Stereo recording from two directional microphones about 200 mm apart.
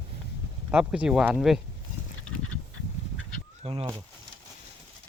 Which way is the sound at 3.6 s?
30° right (ahead or behind).